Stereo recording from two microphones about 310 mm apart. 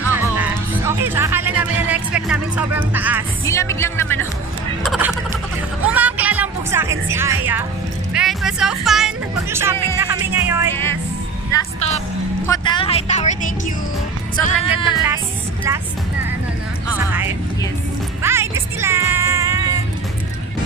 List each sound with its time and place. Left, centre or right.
0.1 s music: centre
3.4 s speech: centre
5.9 s music: centre
8.1 s speech: centre
11.5 s a woman's voice: left
16.9 s music: centre